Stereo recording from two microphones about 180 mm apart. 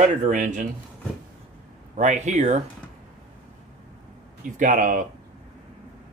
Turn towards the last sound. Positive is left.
turn(degrees=-45)  # may be behind; listen again after turning